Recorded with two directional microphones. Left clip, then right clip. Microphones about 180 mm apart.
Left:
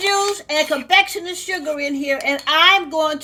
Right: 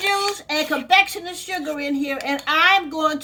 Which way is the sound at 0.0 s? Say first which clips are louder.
Left 3 dB; 20° left (ahead or behind).